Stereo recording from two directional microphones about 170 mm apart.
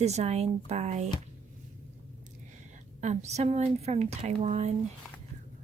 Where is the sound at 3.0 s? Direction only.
40° right (ahead or behind).